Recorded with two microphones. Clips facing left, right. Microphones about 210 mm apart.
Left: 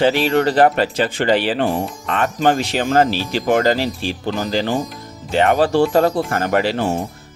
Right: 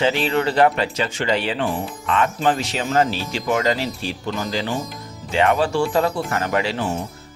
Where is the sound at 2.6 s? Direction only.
60° left (ahead or behind).